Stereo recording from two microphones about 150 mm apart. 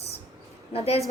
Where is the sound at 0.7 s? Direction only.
40° left (ahead or behind).